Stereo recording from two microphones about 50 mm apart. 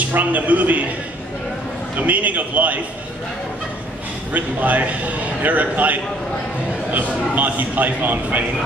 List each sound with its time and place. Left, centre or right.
0.0 s a man's voice: right
2.0 s a man's voice: right
4.3 s a man's voice: right